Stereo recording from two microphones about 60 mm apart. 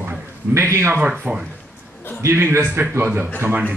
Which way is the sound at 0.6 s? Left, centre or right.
Right.